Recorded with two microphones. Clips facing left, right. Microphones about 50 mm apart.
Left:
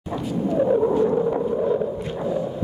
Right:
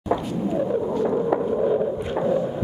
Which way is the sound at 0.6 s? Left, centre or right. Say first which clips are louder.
Left 6 dB; centre.